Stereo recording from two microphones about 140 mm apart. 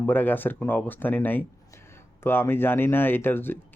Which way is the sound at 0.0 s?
15° left (ahead or behind).